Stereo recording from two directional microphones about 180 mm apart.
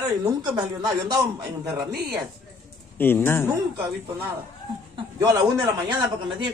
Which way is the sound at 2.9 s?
10° left (ahead or behind).